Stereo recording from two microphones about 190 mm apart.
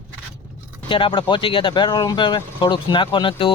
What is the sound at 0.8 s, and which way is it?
Speech, 25° left (ahead or behind).